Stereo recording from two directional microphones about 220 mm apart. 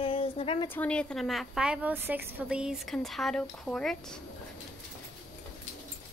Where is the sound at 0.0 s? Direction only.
25° left (ahead or behind).